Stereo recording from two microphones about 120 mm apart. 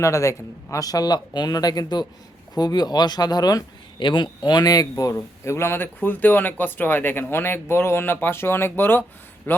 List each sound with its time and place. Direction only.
0.0 s a man's voice: 25° left (ahead or behind)